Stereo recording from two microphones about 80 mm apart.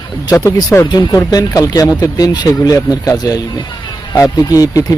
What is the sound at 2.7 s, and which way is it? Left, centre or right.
Speech, left.